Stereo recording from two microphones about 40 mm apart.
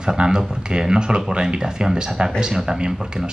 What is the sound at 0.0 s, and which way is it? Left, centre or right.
Speech, centre.